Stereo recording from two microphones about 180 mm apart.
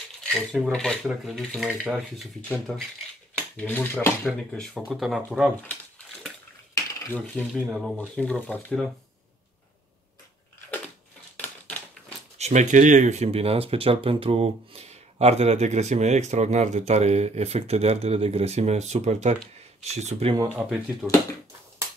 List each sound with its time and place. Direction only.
0.2 s a sound: 5° left (ahead or behind)
3.3 s speech: 10° left (ahead or behind)
4.3 s a sound: 5° left (ahead or behind)
6.7 s dishes: 10° left (ahead or behind)
8.0 s speech: 5° left (ahead or behind)
11.3 s crushing: 10° left (ahead or behind)
12.4 s speech: 40° right (ahead or behind)
20.3 s speech: 10° right (ahead or behind)